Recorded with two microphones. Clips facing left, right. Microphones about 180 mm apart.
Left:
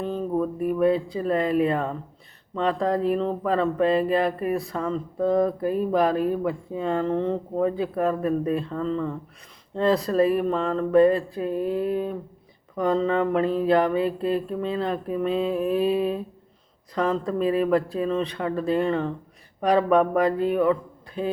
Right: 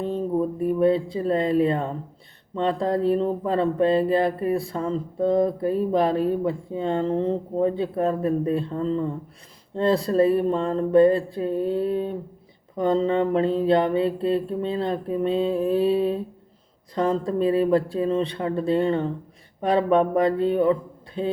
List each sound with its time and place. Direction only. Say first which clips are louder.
0.0 s speech: right 1 dB; 30° right (ahead or behind)